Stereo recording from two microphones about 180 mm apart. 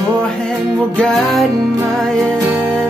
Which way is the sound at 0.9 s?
Centre (ahead or behind).